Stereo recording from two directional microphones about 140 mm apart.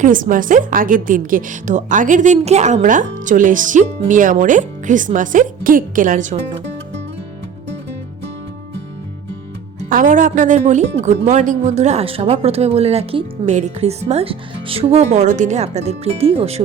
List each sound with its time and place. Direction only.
0.0 s a woman's voice: 70° right (ahead or behind)
9.9 s speech: 70° right (ahead or behind); by 16.6 s 45° right (ahead or behind)